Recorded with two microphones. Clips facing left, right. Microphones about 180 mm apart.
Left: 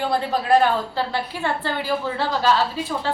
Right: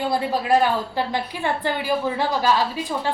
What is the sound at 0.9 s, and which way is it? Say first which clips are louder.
A woman's voice: even; 15° right (ahead or behind).